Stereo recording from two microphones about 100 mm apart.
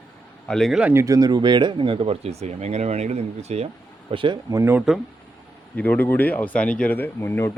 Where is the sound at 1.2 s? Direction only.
45° right (ahead or behind); by 3.6 s 90° right.